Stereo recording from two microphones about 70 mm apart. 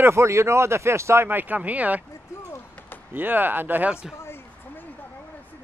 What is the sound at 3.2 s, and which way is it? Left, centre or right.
Speech, right.